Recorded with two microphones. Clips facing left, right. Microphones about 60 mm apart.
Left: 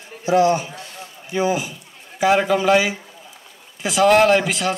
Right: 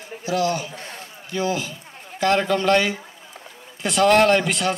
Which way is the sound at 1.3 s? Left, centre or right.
Centre.